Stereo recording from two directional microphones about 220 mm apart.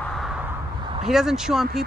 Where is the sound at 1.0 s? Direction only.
Centre (ahead or behind).